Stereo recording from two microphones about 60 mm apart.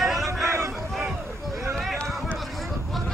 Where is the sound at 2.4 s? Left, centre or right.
Centre.